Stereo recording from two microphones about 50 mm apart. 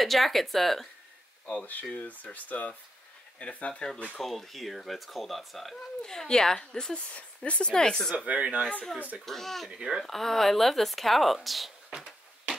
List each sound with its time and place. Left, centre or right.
0.0 s speech: centre
1.4 s speech: left
4.2 s speech: centre
6.0 s speech: centre
7.1 s speech: left
7.7 s speech: centre
8.3 s speech: right
9.2 s speech: centre
9.7 s speech: centre
10.0 s speech: centre
11.9 s a sound: centre